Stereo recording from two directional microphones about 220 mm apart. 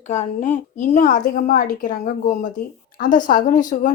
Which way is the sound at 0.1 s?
35° left (ahead or behind).